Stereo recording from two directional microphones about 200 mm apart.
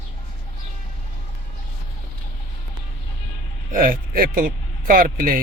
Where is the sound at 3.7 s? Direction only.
45° right (ahead or behind).